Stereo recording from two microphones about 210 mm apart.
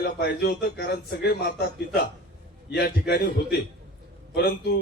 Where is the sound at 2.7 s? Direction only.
50° left (ahead or behind).